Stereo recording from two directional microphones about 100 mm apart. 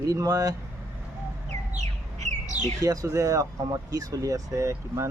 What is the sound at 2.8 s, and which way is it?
Speech, 35° right (ahead or behind).